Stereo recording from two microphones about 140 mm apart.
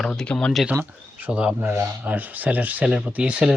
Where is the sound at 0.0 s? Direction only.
5° left (ahead or behind).